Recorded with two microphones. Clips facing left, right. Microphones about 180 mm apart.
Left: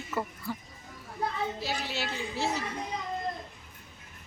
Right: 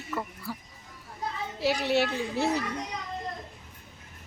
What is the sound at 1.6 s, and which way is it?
Speech, 65° right (ahead or behind).